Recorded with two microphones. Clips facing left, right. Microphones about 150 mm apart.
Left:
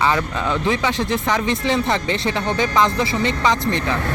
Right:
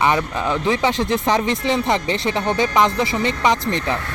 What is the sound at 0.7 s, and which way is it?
Speech, 25° right (ahead or behind).